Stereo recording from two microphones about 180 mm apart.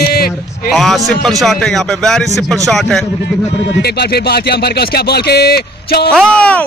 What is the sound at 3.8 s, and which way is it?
Speech, 65° left (ahead or behind).